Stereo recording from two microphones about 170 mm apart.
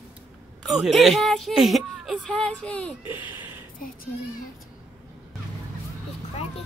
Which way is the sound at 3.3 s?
10° right (ahead or behind).